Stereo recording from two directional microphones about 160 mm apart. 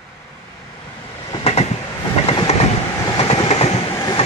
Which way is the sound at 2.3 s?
35° left (ahead or behind).